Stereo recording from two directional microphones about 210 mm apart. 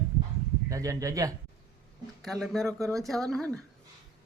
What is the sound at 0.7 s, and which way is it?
Speech, 15° right (ahead or behind).